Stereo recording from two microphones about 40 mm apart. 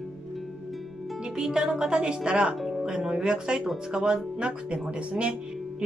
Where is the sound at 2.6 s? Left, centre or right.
Centre.